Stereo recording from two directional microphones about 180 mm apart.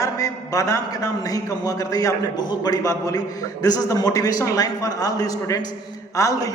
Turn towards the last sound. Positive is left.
turn(degrees=20)  # may be behind; listen again after turning